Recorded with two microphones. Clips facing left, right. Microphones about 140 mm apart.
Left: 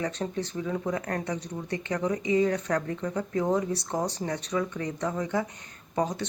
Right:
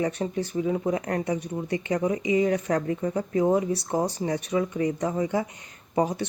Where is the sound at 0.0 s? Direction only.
15° right (ahead or behind).